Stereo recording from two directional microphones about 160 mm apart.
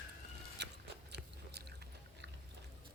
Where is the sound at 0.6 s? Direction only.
90° right.